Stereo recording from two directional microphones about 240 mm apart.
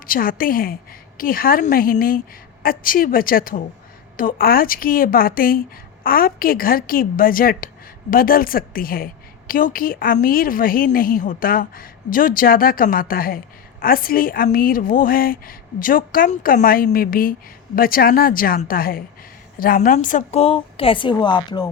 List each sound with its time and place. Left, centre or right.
0.1 s a woman's voice: left; by 21.7 s centre